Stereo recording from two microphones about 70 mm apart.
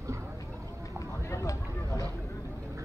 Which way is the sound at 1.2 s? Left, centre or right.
Left.